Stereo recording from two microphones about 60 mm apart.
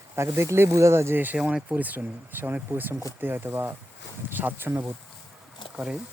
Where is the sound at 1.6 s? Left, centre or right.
Right.